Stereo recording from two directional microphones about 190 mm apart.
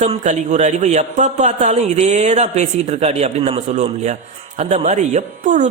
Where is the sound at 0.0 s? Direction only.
40° right (ahead or behind).